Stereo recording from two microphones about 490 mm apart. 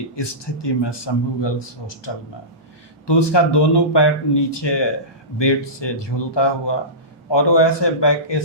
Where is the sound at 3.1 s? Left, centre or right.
Left.